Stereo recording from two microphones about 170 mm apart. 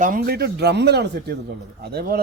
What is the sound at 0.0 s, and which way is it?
Speech, 55° right (ahead or behind).